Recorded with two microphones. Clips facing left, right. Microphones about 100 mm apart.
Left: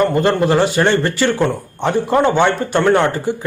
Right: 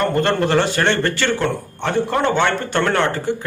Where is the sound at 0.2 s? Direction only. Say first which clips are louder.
Left 3 dB; 10° left (ahead or behind).